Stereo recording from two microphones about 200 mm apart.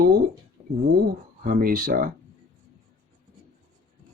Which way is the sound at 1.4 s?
45° right (ahead or behind).